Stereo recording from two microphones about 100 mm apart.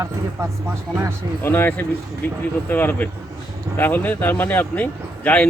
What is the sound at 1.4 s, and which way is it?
A man's voice, 20° left (ahead or behind).